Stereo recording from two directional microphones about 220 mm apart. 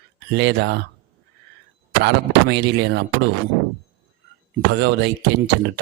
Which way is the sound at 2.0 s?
50° right (ahead or behind).